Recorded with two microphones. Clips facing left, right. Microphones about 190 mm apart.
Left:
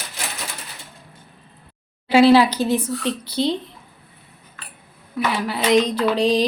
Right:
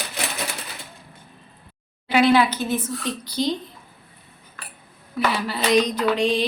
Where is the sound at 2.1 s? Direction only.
35° left (ahead or behind).